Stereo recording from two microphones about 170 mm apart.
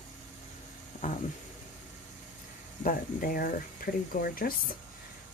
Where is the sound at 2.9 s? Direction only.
60° left (ahead or behind).